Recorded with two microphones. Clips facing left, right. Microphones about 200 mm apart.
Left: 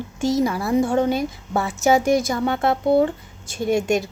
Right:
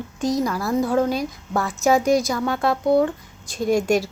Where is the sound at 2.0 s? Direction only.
25° left (ahead or behind).